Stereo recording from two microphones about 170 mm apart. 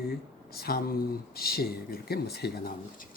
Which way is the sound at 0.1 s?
65° left (ahead or behind).